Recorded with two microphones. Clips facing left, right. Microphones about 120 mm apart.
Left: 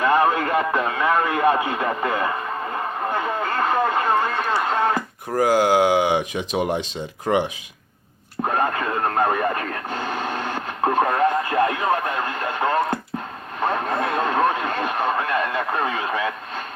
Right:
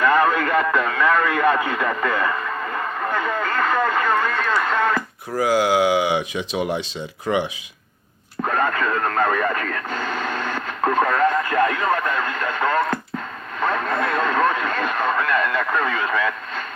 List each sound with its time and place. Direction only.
0.0 s speech: 25° left (ahead or behind)
5.3 s speech: 45° left (ahead or behind)
8.4 s radio: 30° left (ahead or behind)